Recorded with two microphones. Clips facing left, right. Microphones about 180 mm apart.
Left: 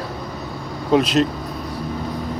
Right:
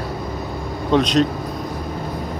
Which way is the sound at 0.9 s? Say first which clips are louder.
Even; 5° left (ahead or behind).